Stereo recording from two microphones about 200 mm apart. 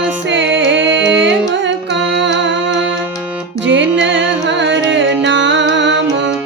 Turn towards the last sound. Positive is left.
turn(degrees=-65)  # may be behind; listen again after turning